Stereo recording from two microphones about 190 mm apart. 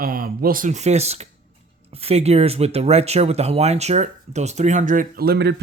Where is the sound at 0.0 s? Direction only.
50° right (ahead or behind).